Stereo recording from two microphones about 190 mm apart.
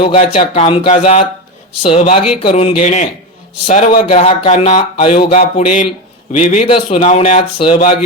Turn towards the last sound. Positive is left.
turn(degrees=35)  # may be behind; listen again after turning